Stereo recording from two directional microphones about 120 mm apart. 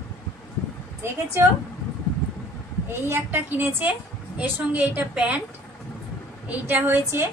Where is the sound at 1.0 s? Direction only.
20° right (ahead or behind).